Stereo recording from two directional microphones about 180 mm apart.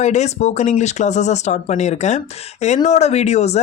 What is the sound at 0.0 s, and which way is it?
Speech, 40° left (ahead or behind).